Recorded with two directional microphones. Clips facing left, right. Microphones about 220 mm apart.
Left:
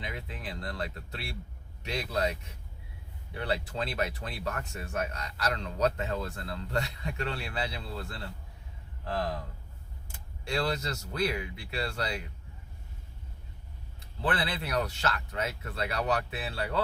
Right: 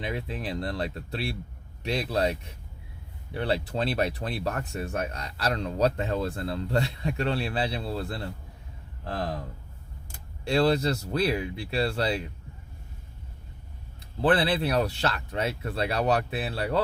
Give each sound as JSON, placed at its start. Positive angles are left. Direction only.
{"t": 0.0, "sound": "speech", "side_deg": -35}
{"t": 3.3, "sound": "speech", "side_deg": -30}
{"t": 10.4, "sound": "speech", "side_deg": -30}
{"t": 14.2, "sound": "speech", "side_deg": -35}